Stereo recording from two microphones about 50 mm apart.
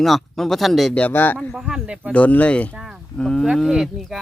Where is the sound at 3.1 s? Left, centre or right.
Centre.